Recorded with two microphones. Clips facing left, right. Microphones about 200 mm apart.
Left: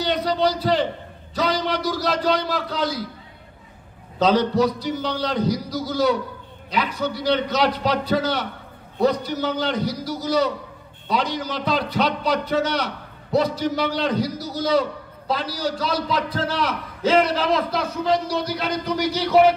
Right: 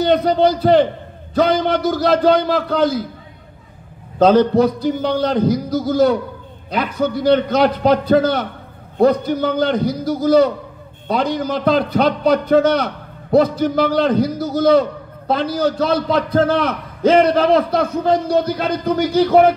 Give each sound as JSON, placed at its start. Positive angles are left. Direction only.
{"t": 0.0, "sound": "a man's voice", "side_deg": -50}
{"t": 4.2, "sound": "a man's voice", "side_deg": -50}